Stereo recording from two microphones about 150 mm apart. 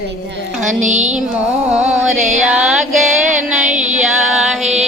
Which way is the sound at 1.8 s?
50° right (ahead or behind).